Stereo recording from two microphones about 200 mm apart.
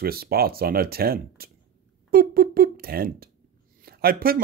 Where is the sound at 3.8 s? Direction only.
50° right (ahead or behind).